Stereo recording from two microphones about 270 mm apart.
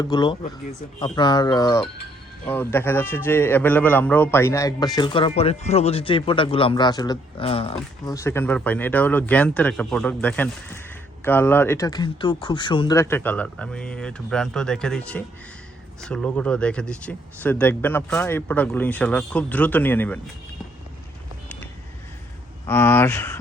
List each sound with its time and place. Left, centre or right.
0.0 s a man's voice: centre
22.6 s a man's voice: centre